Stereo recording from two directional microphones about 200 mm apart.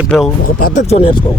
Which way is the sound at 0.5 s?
45° left (ahead or behind).